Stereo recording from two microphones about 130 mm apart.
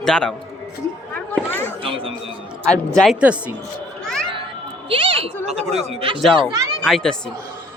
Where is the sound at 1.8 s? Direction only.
45° right (ahead or behind).